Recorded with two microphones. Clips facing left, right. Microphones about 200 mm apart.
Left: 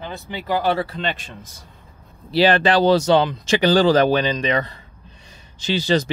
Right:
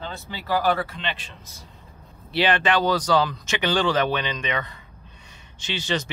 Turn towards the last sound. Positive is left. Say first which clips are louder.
# left 8 dB
turn(degrees=35)  # may be behind; listen again after turning